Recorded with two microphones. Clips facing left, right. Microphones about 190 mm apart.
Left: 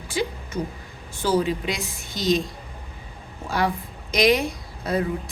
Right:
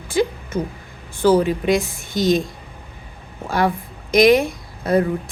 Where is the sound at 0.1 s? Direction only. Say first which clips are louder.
Right 7 dB; 50° right (ahead or behind).